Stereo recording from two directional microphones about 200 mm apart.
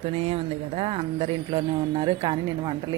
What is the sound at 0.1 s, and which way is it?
A woman's voice, 30° right (ahead or behind).